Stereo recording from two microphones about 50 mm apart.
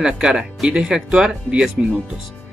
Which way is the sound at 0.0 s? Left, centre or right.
Centre.